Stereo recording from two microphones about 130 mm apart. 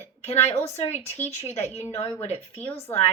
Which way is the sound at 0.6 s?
55° left (ahead or behind).